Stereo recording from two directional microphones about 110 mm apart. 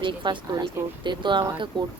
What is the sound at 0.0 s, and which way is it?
Speech, 45° right (ahead or behind).